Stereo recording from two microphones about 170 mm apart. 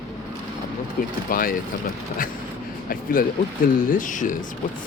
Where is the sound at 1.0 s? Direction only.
60° left (ahead or behind).